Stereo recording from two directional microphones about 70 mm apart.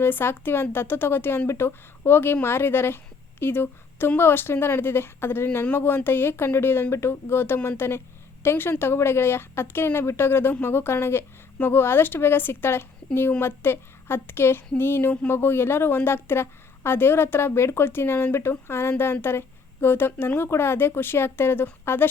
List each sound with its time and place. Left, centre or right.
0.0 s a woman's voice: left